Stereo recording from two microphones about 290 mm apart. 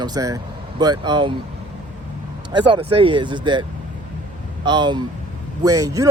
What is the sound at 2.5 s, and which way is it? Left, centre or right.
Speech, centre.